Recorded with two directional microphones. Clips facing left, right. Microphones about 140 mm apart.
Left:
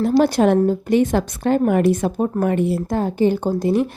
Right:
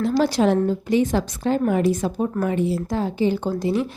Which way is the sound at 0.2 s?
55° left (ahead or behind).